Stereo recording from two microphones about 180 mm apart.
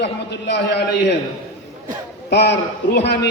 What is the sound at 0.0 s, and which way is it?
Speech, 70° left (ahead or behind).